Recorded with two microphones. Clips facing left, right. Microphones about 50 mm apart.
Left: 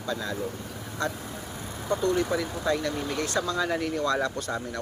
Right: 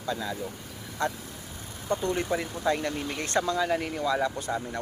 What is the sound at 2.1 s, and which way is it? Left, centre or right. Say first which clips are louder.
Speech: left 2 dB; right.